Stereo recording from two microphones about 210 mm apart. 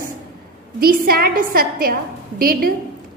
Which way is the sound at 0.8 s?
45° right (ahead or behind).